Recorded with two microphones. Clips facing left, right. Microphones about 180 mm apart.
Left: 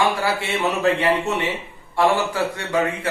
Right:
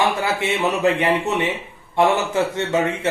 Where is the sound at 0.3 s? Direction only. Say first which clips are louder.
Right 2 dB; 20° right (ahead or behind).